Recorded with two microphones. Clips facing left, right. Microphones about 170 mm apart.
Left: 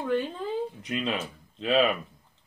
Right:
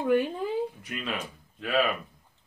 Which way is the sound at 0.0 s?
10° right (ahead or behind).